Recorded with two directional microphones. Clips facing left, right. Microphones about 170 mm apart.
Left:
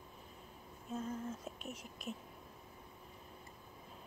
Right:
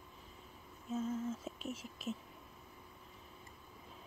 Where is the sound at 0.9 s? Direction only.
5° right (ahead or behind).